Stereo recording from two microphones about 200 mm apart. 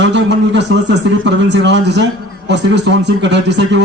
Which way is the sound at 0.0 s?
60° right (ahead or behind).